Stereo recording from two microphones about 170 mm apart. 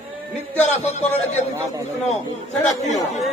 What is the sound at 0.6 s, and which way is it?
Speech, 40° left (ahead or behind).